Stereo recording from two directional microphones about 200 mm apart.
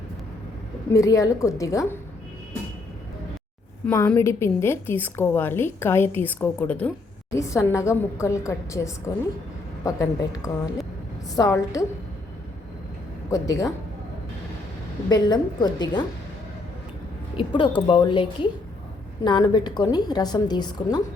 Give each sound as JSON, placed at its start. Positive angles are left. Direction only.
{"t": 0.9, "sound": "a woman's voice", "side_deg": 15}
{"t": 3.8, "sound": "a woman's voice", "side_deg": 10}
{"t": 13.3, "sound": "a woman's voice", "side_deg": 15}
{"t": 15.1, "sound": "a woman's voice", "side_deg": 20}
{"t": 17.3, "sound": "a woman's voice", "side_deg": 25}